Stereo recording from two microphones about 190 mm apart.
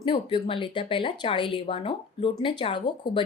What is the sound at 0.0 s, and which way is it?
Speech, 25° left (ahead or behind).